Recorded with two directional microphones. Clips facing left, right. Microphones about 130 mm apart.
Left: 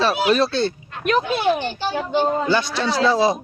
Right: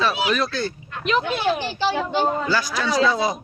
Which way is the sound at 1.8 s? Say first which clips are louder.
Even; 90° right.